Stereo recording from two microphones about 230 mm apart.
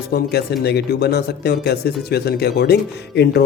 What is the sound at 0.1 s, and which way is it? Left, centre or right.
Speech, left.